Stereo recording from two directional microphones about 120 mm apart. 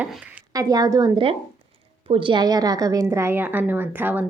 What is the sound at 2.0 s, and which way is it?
A woman's voice, 45° right (ahead or behind).